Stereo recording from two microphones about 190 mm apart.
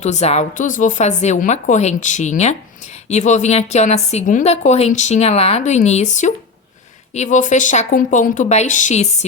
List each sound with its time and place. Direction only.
0.0 s a woman's voice: 35° left (ahead or behind)